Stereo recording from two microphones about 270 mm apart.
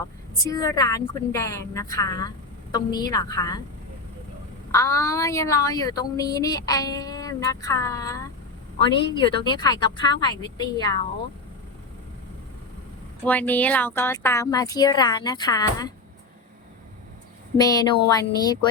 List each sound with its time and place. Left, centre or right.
0.0 s a woman's voice: centre
4.7 s a woman's voice: centre
13.2 s a woman's voice: centre
17.6 s a woman's voice: centre